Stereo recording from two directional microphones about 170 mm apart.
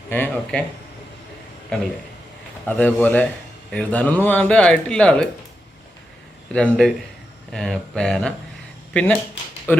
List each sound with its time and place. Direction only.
0.1 s speech: 10° left (ahead or behind)
2.6 s speech: 10° left (ahead or behind)
6.5 s speech: 5° left (ahead or behind)